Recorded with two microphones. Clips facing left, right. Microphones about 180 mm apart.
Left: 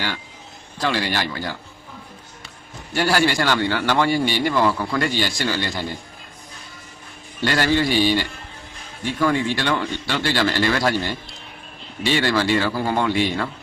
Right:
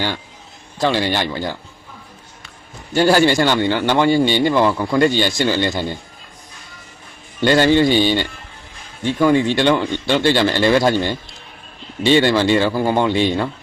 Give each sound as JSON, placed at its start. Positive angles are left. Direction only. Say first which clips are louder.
{"t": 0.8, "sound": "a man's voice", "louder": "right 5 dB", "side_deg": -25}
{"t": 2.9, "sound": "a man's voice", "louder": "right 6 dB", "side_deg": -25}
{"t": 7.4, "sound": "a man's voice", "louder": "right 7 dB", "side_deg": -25}